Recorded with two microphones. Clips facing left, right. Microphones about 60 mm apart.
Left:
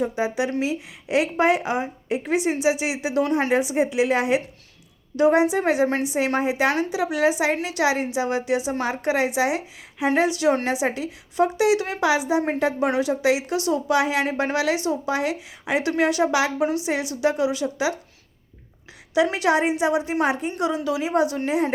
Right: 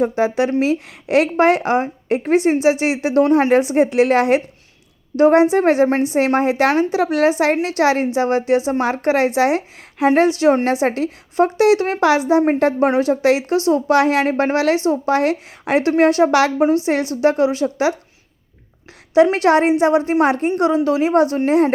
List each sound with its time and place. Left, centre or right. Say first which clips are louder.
0.2 s a woman's voice: right 7 dB; right
6.7 s a woman's voice: right 6 dB; right
9.0 s a woman's voice: right 6 dB; right
13.6 s a woman's voice: right 7 dB; right
13.8 s a woman's voice: right 6 dB; right
19.1 s a woman's voice: right 7 dB; right
20.6 s a woman's voice: right 8 dB; right